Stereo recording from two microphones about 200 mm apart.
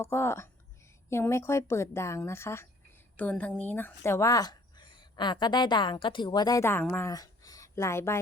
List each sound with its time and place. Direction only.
0.0 s a woman's voice: 15° left (ahead or behind)